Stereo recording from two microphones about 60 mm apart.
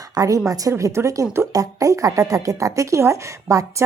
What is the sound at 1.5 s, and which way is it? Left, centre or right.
A woman's voice, right.